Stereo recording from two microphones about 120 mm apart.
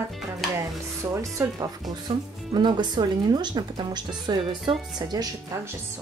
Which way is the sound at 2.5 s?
40° right (ahead or behind).